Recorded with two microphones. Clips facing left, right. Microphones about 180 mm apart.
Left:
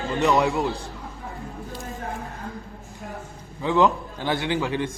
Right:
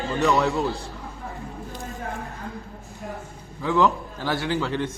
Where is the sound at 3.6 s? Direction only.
20° left (ahead or behind).